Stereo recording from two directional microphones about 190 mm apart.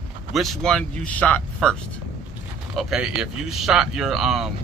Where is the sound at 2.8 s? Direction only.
Centre (ahead or behind).